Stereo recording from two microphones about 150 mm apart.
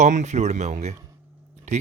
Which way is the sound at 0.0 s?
50° right (ahead or behind).